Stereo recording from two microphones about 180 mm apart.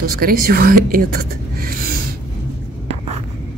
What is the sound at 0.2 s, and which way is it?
Speech, 55° right (ahead or behind).